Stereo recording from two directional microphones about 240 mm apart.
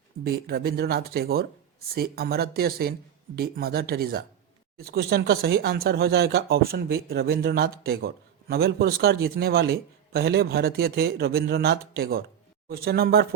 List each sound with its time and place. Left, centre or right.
0.3 s speech: right